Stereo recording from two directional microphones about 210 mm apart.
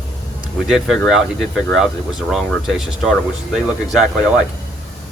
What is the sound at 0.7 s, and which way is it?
Speech, centre (ahead or behind).